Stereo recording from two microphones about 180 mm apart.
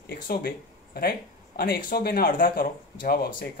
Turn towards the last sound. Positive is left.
turn(degrees=55)  # may be behind; listen again after turning